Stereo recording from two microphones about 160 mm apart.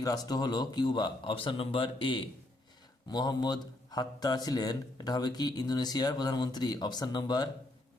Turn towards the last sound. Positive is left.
turn(degrees=25)  # may be behind; listen again after turning